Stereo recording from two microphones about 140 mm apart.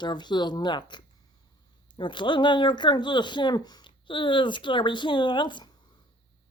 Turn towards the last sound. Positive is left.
turn(degrees=35)  # may be behind; listen again after turning